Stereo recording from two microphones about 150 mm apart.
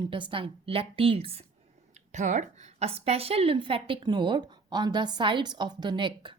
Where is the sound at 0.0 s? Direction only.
35° right (ahead or behind).